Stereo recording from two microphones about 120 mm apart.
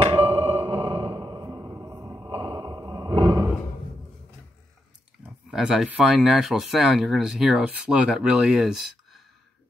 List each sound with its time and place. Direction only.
0.0 s a sound: 50° right (ahead or behind)
2.8 s roar: 40° right (ahead or behind)
5.2 s speech: 5° right (ahead or behind)